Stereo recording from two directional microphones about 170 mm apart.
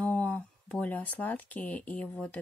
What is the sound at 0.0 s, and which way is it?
Speech, 10° left (ahead or behind).